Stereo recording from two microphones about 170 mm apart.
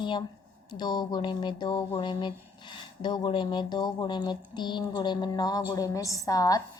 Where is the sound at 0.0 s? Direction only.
25° left (ahead or behind).